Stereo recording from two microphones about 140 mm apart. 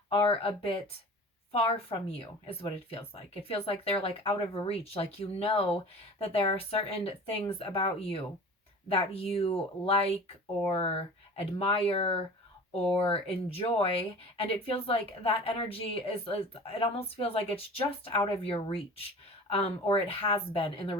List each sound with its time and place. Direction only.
0.1 s speech: 40° left (ahead or behind)